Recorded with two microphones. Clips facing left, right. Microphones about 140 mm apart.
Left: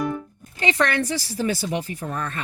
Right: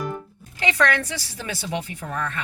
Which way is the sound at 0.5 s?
30° left (ahead or behind).